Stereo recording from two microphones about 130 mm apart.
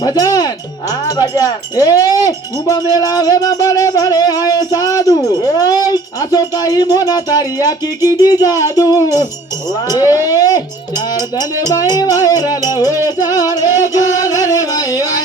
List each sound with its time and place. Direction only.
0.0 s wind chime: 30° left (ahead or behind)
2.2 s speech: 30° left (ahead or behind)
12.7 s music: 20° right (ahead or behind)
13.1 s music: 30° left (ahead or behind)